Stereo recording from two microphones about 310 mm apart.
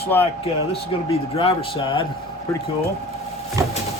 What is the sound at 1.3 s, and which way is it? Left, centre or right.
Speech, centre.